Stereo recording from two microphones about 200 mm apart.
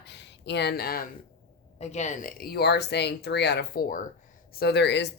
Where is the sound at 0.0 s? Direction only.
60° left (ahead or behind).